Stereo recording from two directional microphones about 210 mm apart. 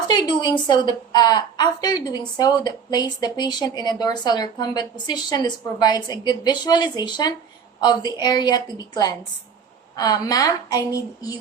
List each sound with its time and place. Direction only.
0.1 s a woman's voice: 20° left (ahead or behind)